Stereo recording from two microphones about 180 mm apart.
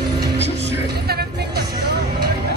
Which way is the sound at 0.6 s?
60° right (ahead or behind).